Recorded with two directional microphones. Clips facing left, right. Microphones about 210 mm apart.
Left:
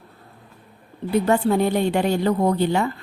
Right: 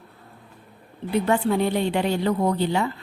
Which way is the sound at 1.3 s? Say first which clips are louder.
Left 2 dB; 45° left (ahead or behind).